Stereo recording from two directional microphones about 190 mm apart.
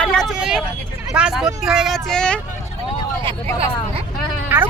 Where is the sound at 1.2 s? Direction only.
5° right (ahead or behind).